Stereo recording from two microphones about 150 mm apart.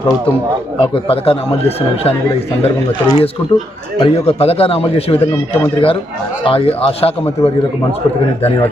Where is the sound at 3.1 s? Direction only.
40° left (ahead or behind).